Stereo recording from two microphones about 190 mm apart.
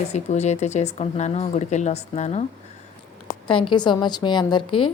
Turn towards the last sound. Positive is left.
turn(degrees=25)  # may be behind; listen again after turning